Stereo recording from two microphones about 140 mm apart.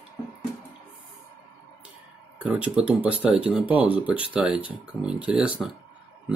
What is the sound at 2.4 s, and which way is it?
Speech, 10° right (ahead or behind).